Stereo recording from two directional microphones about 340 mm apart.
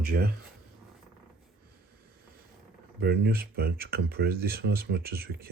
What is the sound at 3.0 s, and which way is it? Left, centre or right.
Speech, right.